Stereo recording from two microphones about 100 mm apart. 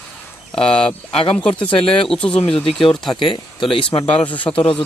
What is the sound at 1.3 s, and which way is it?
Speech, 10° left (ahead or behind).